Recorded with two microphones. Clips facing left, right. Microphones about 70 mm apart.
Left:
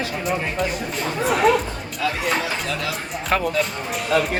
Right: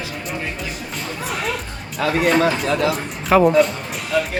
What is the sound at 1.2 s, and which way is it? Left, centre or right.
Music, centre.